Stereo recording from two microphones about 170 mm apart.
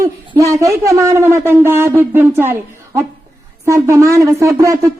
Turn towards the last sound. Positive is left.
turn(degrees=-20)  # may be behind; listen again after turning